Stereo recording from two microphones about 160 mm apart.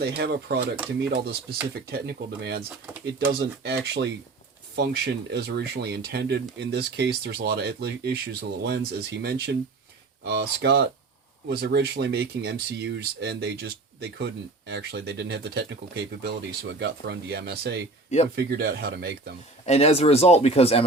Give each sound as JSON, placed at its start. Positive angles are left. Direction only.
{"t": 0.0, "sound": "speech", "side_deg": -90}
{"t": 1.1, "sound": "speech", "side_deg": -70}
{"t": 1.9, "sound": "speech", "side_deg": -90}
{"t": 19.6, "sound": "speech", "side_deg": 40}